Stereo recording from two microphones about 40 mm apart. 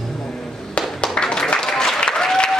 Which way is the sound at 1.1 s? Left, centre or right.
Centre.